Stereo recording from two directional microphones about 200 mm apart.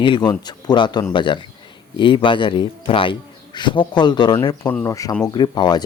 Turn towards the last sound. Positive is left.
turn(degrees=20)  # may be behind; listen again after turning